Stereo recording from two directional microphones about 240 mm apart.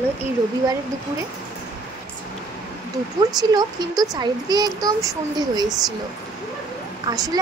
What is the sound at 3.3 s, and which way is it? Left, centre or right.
A woman's voice, centre.